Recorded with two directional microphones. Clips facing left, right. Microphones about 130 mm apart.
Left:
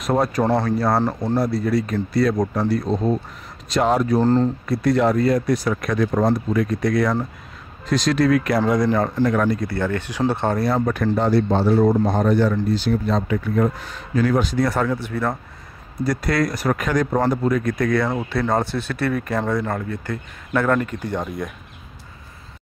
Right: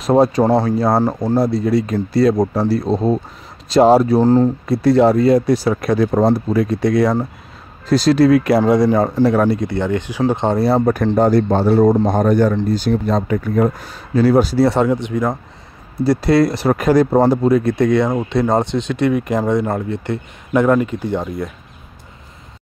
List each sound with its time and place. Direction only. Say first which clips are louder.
0.0 s speech: right 6 dB; 25° right (ahead or behind)
4.2 s speech: right 5 dB; 15° right (ahead or behind)
4.6 s speech: right 7 dB; 30° right (ahead or behind)
9.2 s speech: right 5 dB; 35° right (ahead or behind)
9.6 s speech: right 4 dB; 20° right (ahead or behind)
11.1 s speech: right 4 dB; 45° right (ahead or behind); by 15.3 s 15° right (ahead or behind)
16.0 s speech: right 7 dB; 30° right (ahead or behind); by 21.3 s 10° right (ahead or behind)